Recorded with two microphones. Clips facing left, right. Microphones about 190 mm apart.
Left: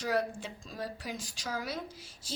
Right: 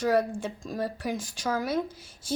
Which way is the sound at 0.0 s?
50° right (ahead or behind).